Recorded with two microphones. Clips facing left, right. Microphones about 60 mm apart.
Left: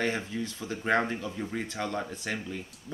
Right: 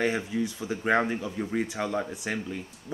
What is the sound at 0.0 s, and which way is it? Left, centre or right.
Speech, centre.